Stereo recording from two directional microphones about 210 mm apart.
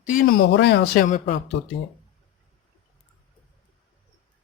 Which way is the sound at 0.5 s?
55° left (ahead or behind).